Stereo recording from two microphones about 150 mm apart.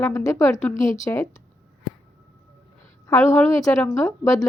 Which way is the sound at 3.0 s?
15° left (ahead or behind).